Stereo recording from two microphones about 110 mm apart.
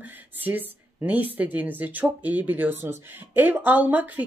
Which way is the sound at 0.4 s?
15° right (ahead or behind).